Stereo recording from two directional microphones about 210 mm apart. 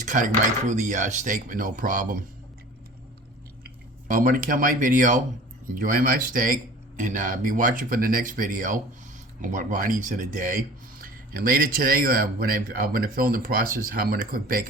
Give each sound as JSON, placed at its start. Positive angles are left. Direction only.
{"t": 0.0, "sound": "dishes", "side_deg": -35}
{"t": 0.7, "sound": "speech", "side_deg": -35}
{"t": 4.1, "sound": "speech", "side_deg": -40}